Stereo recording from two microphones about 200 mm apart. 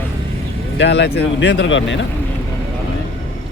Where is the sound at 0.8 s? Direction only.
60° left (ahead or behind).